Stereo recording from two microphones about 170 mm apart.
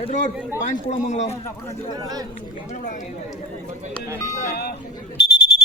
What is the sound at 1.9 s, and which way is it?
Speech, 20° right (ahead or behind).